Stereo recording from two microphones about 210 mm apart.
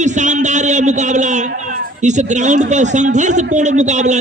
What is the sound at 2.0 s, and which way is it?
A man's voice, 35° right (ahead or behind).